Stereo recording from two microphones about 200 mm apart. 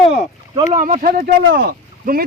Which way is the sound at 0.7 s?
40° right (ahead or behind).